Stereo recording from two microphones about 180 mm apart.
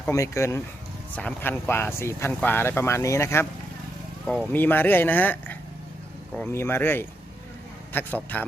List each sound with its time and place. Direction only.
0.1 s speech: 15° left (ahead or behind)
4.5 s speech: 10° left (ahead or behind)